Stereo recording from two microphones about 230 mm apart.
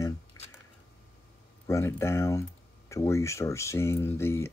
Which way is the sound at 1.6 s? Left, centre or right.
Centre.